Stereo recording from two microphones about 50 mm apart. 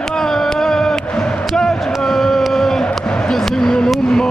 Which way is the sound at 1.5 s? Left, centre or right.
Centre.